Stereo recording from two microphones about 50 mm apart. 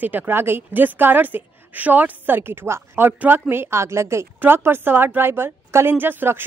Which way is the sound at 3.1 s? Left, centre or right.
Right.